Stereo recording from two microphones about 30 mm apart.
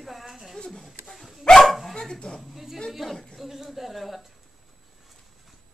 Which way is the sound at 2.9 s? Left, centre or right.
Centre.